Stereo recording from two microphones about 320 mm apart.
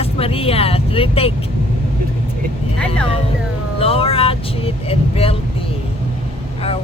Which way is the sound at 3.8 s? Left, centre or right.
Centre.